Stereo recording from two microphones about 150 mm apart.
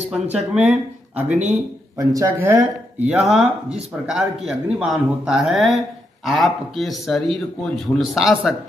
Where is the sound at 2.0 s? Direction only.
20° right (ahead or behind).